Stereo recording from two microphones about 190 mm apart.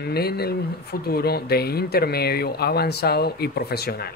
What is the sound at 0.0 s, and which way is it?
Speech, 55° left (ahead or behind).